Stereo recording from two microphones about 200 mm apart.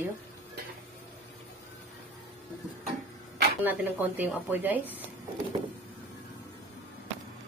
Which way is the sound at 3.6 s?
10° right (ahead or behind).